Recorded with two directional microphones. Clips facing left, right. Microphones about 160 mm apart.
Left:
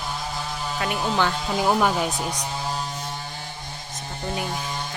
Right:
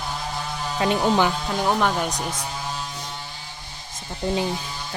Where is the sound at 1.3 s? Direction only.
5° left (ahead or behind).